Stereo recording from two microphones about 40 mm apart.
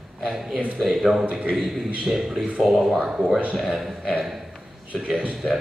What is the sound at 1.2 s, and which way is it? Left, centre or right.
Speech, right.